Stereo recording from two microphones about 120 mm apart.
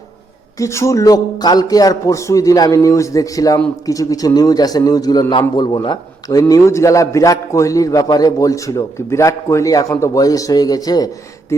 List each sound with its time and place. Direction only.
0.6 s a man's voice: 25° left (ahead or behind)
6.5 s a man's voice: 25° left (ahead or behind)